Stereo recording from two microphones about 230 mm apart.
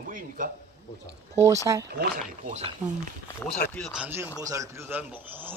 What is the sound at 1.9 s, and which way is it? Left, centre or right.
Speech, right.